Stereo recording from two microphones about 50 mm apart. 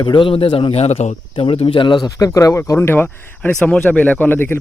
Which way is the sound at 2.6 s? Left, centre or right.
Left.